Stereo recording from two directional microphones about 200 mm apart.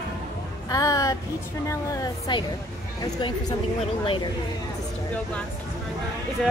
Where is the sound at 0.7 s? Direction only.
15° left (ahead or behind).